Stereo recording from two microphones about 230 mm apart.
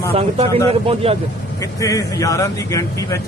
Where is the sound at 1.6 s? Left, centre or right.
Centre.